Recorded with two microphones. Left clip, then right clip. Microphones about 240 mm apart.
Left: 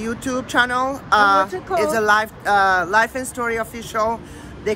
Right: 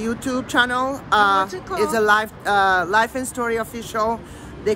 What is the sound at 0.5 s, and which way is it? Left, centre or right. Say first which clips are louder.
Speech: left 1 dB; centre.